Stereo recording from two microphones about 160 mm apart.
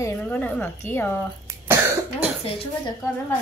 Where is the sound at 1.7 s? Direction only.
15° right (ahead or behind).